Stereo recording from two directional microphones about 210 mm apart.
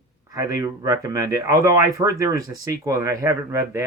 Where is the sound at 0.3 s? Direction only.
15° right (ahead or behind).